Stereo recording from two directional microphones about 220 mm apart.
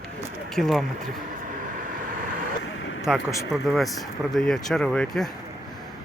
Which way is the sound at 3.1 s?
Centre (ahead or behind).